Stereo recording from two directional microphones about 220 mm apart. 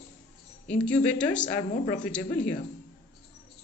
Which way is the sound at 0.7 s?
5° left (ahead or behind).